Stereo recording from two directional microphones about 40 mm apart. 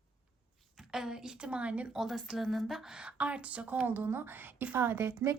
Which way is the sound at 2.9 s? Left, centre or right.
Right.